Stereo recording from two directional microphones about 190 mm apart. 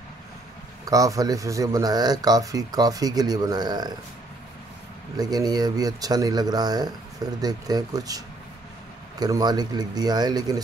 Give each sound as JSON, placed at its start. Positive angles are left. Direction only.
{"t": 0.8, "sound": "speech", "side_deg": -20}
{"t": 5.1, "sound": "speech", "side_deg": -20}
{"t": 9.2, "sound": "speech", "side_deg": -20}